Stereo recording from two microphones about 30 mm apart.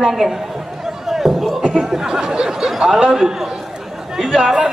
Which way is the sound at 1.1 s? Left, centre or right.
Centre.